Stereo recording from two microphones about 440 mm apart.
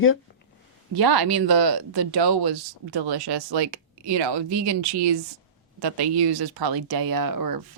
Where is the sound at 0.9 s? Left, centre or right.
Right.